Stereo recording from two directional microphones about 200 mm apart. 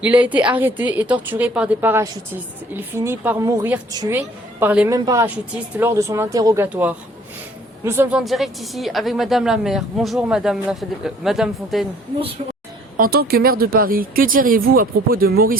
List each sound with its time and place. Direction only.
0.0 s a woman's voice: 5° right (ahead or behind)
4.9 s a woman's voice: 20° right (ahead or behind)
8.2 s speech: centre (ahead or behind)
13.0 s speech: 50° right (ahead or behind)